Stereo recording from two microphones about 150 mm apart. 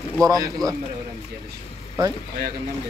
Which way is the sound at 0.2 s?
25° right (ahead or behind).